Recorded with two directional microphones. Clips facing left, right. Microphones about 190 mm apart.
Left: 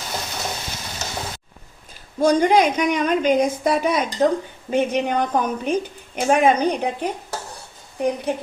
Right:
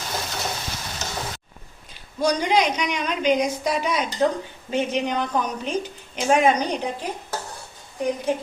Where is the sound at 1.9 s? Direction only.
50° left (ahead or behind).